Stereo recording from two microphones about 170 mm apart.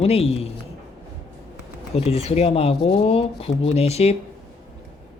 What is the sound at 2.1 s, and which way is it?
Speech, 40° left (ahead or behind).